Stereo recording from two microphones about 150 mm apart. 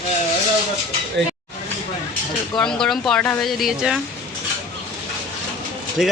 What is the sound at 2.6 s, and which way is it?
Speech, 5° left (ahead or behind).